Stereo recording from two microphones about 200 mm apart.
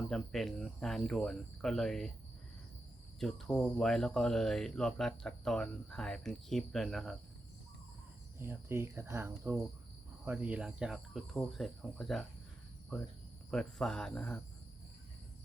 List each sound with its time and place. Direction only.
0.1 s speech: centre (ahead or behind)
3.2 s speech: centre (ahead or behind)
8.4 s speech: 10° right (ahead or behind)
13.5 s speech: 5° left (ahead or behind)